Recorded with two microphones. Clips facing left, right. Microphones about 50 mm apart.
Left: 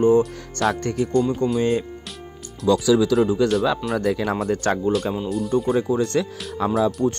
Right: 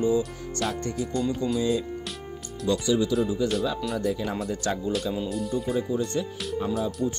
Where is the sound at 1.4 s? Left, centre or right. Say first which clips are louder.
Left 5 dB; left.